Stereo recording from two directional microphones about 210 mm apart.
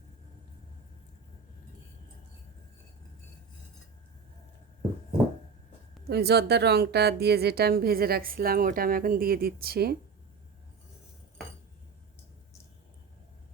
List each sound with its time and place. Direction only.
6.1 s speech: 50° right (ahead or behind)